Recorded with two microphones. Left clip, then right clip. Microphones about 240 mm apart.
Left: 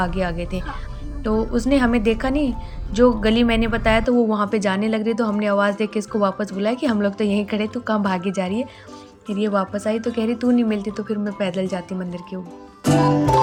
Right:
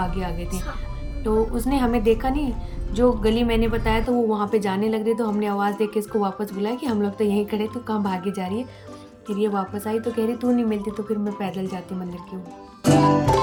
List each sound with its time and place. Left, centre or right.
0.0 s speech: centre
12.8 s music: centre